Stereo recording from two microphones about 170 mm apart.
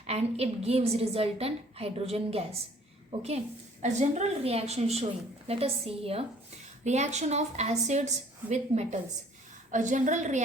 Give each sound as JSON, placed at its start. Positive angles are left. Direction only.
{"t": 0.0, "sound": "a woman's voice", "side_deg": -40}